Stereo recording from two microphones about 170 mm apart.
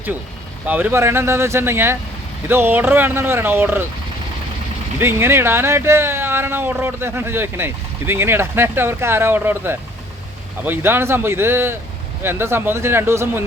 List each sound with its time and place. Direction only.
0.7 s speech: 10° right (ahead or behind)
4.9 s speech: 15° right (ahead or behind)